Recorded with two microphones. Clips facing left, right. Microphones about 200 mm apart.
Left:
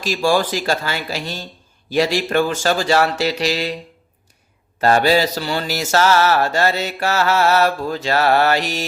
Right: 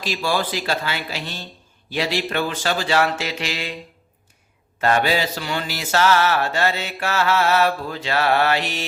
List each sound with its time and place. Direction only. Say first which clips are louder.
0.0 s speech: left 6 dB; 45° left (ahead or behind)
1.9 s mantra: left 6 dB; 45° left (ahead or behind)
4.8 s mantra: left 5 dB; 35° left (ahead or behind)